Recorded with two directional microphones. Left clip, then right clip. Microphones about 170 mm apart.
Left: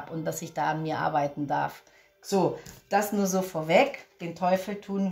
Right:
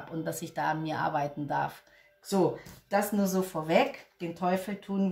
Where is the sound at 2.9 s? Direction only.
45° left (ahead or behind).